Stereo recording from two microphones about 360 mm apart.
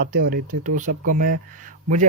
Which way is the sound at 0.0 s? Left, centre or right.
Right.